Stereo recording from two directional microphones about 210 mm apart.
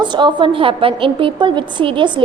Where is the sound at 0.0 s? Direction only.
20° right (ahead or behind).